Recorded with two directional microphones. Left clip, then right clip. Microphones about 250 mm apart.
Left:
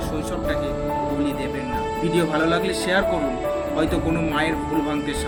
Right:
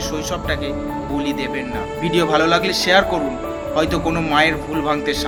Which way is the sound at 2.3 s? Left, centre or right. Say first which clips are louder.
Right 5 dB; centre.